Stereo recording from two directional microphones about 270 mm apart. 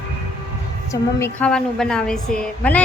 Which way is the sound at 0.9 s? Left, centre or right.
Centre.